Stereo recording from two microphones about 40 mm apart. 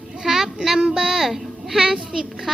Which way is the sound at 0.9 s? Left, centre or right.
Centre.